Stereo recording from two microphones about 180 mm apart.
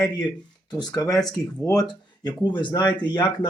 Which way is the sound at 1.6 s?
20° left (ahead or behind).